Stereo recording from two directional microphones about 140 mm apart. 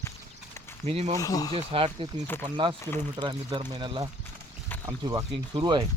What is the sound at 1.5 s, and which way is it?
Speech, 40° right (ahead or behind).